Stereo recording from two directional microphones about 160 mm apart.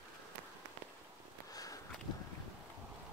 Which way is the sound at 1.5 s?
20° left (ahead or behind).